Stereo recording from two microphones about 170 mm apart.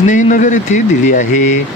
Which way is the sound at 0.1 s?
50° left (ahead or behind).